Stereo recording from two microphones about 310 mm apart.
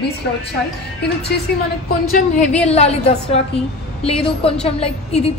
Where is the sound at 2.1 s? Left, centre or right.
Left.